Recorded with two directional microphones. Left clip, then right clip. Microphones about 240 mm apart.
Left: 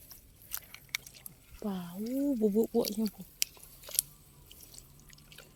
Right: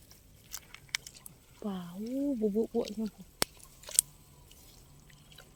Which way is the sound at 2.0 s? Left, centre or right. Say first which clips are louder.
Left 2 dB; left.